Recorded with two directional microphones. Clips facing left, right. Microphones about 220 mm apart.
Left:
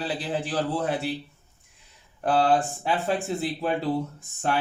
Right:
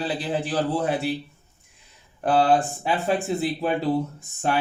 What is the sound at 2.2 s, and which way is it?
Speech, 5° right (ahead or behind).